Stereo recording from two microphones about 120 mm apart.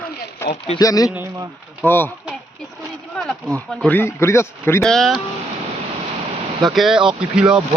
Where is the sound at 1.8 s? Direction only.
15° left (ahead or behind).